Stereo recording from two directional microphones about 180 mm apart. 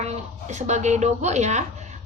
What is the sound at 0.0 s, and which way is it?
Speech, 40° right (ahead or behind).